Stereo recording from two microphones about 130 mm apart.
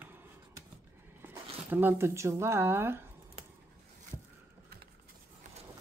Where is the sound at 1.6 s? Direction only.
15° right (ahead or behind).